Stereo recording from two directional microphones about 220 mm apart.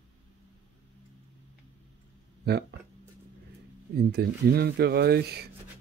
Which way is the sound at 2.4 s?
50° right (ahead or behind).